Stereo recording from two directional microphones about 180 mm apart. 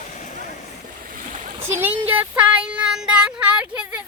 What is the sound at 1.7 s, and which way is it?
Child singing, 10° right (ahead or behind).